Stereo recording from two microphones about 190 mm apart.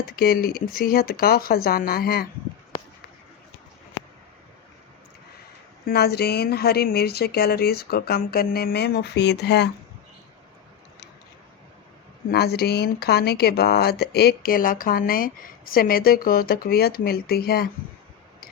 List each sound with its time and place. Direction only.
0.0 s speech: 50° left (ahead or behind)
5.8 s speech: 55° left (ahead or behind)
12.3 s speech: 55° left (ahead or behind)